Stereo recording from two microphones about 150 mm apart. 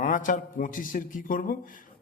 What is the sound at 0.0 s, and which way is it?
A man's voice, 60° left (ahead or behind).